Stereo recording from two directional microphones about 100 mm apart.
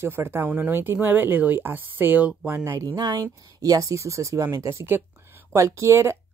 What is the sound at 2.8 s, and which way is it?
Speech, 45° right (ahead or behind).